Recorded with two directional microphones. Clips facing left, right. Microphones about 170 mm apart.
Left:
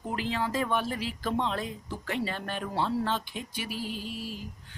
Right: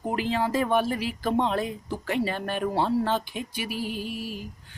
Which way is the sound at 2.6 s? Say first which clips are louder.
Right 5 dB; 45° right (ahead or behind).